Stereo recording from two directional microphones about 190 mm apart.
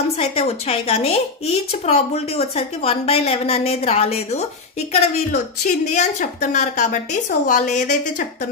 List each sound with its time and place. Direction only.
0.2 s a woman's voice: 30° left (ahead or behind)